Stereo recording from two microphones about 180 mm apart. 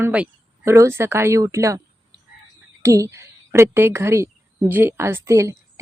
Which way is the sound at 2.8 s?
15° right (ahead or behind).